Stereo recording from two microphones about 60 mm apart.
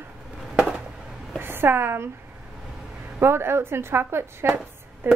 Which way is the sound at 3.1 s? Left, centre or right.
Right.